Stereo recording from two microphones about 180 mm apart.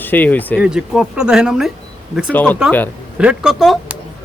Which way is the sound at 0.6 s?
5° right (ahead or behind).